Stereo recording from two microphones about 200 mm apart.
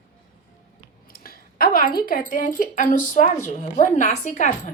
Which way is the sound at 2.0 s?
45° left (ahead or behind).